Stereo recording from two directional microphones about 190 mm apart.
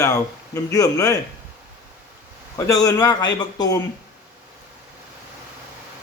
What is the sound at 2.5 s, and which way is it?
Speech, 20° left (ahead or behind).